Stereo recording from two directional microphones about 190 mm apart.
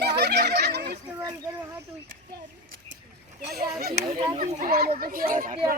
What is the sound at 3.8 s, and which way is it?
Speech, 55° right (ahead or behind).